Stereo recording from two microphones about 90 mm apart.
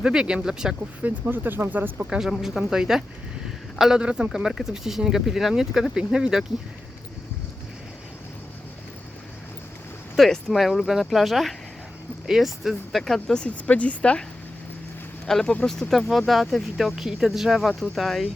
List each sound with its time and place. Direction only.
0.0 s speech: 10° right (ahead or behind)
1.0 s speech: 20° right (ahead or behind)
2.4 s speech: 5° right (ahead or behind)
10.2 s speech: centre (ahead or behind)
15.3 s speech: 5° left (ahead or behind)